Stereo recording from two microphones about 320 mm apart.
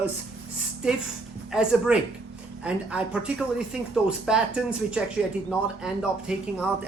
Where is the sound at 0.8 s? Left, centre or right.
Centre.